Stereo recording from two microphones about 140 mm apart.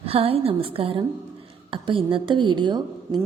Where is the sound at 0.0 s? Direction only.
45° right (ahead or behind).